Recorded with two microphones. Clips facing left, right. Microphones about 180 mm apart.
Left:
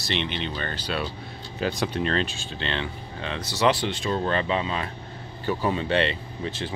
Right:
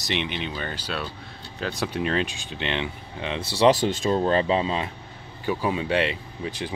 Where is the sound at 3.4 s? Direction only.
30° right (ahead or behind).